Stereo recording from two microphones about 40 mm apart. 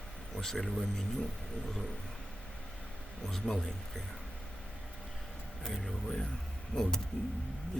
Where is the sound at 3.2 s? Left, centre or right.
Centre.